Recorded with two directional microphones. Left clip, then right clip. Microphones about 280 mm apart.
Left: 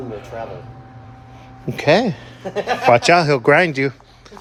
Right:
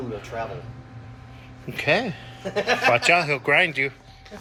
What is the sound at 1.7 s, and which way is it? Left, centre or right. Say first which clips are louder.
Speech: left 7 dB; left.